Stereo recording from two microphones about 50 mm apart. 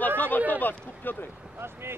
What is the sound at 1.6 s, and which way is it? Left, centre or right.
Speech, right.